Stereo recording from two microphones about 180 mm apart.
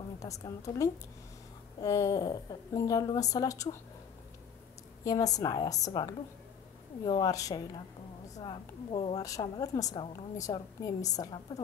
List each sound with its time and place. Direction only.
0.2 s a woman's voice: 20° left (ahead or behind)
5.0 s a woman's voice: 20° left (ahead or behind)